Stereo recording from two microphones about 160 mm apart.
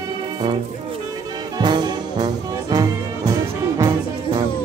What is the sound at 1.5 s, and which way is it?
Brass instrument, 25° right (ahead or behind).